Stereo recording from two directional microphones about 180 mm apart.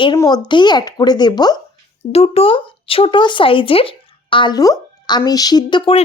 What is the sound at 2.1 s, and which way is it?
Speech, 35° left (ahead or behind).